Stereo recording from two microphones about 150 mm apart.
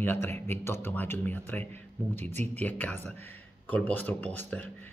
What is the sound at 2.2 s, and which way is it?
Speech, 50° right (ahead or behind).